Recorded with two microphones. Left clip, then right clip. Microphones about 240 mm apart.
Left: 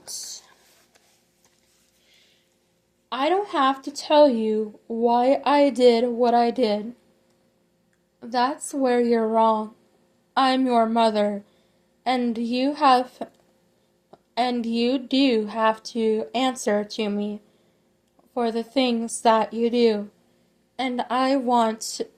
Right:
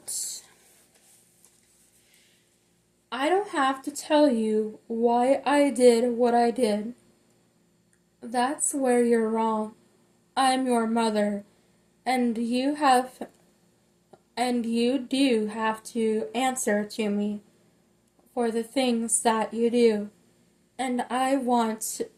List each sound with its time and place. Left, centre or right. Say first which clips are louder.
0.0 s a sound: left 1 dB; left
3.1 s speech: left 3 dB; left
8.2 s speech: left 3 dB; left
14.3 s speech: left 3 dB; left
18.3 s speech: left 3 dB; left